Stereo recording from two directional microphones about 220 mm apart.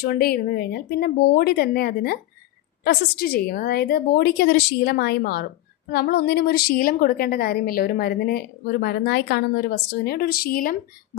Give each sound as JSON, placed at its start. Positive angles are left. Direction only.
{"t": 0.0, "sound": "a woman's voice", "side_deg": 45}